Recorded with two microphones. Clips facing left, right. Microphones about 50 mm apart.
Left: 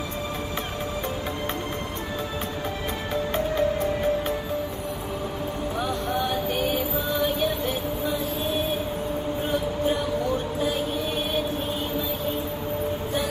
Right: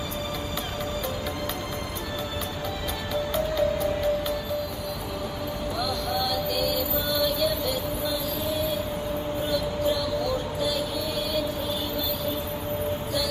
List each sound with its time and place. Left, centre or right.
3.3 s music: left
5.8 s music: left
9.5 s a sound: left